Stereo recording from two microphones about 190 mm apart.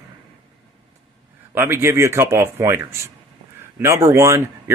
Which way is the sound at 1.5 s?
15° right (ahead or behind).